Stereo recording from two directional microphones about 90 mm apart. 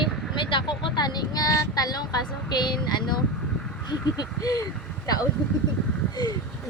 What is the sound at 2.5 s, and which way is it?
Speech, 55° left (ahead or behind).